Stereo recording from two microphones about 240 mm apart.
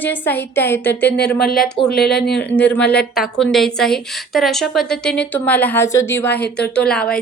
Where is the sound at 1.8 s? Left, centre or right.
Left.